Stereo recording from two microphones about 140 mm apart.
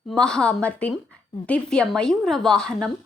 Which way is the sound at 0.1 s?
5° left (ahead or behind).